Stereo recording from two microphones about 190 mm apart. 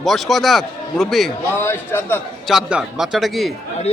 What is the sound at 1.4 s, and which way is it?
Speech, 10° left (ahead or behind).